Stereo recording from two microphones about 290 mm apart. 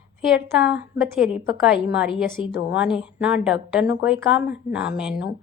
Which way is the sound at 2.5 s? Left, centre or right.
Left.